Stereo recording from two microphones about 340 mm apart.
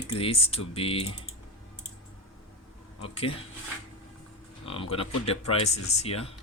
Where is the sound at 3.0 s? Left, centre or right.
Centre.